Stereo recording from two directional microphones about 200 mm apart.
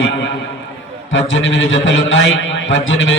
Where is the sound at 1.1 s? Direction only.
75° left (ahead or behind).